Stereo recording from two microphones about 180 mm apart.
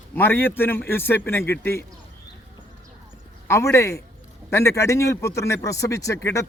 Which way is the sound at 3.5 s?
15° left (ahead or behind).